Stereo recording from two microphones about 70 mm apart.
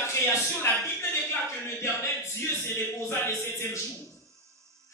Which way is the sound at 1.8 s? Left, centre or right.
Left.